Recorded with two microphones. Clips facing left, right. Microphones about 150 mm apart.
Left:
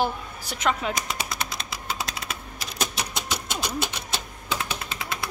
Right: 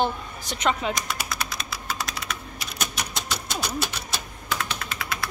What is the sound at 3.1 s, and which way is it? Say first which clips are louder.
Typing: right 1 dB; 15° left (ahead or behind).